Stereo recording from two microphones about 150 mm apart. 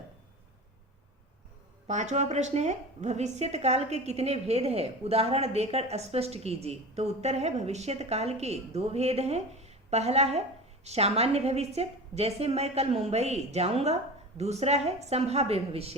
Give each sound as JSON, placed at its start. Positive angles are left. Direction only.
{"t": 1.9, "sound": "a woman's voice", "side_deg": -50}